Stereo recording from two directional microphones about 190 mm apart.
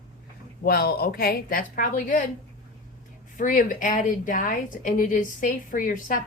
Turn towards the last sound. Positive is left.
turn(degrees=45)  # may be behind; listen again after turning